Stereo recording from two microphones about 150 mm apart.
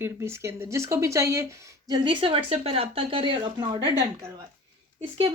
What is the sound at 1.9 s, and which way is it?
Speech, 30° right (ahead or behind).